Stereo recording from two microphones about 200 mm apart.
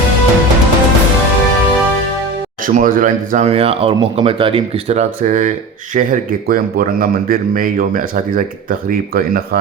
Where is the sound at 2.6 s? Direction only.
40° right (ahead or behind).